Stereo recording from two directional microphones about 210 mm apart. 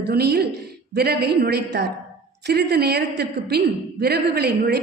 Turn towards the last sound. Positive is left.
turn(degrees=-50)  # may be behind; listen again after turning